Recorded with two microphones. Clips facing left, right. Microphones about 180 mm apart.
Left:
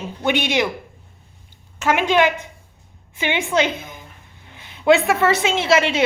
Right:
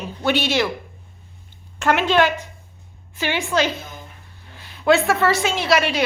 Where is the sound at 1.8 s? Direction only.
10° left (ahead or behind).